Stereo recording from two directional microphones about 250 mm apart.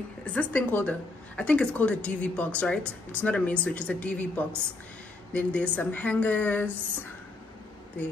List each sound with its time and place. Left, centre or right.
0.2 s speech: centre